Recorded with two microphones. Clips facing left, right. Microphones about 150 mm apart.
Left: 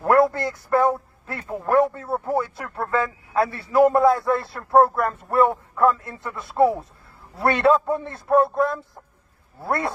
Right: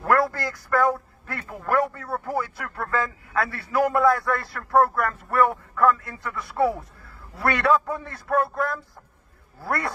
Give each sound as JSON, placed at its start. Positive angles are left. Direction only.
{"t": 0.0, "sound": "a man's voice", "side_deg": 25}